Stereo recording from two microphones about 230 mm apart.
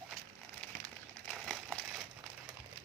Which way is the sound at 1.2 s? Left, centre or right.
Centre.